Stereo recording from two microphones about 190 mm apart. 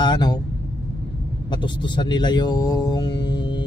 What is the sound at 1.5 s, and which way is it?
A man's voice, 25° left (ahead or behind).